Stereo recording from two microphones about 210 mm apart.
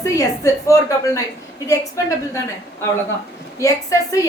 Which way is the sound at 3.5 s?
15° left (ahead or behind).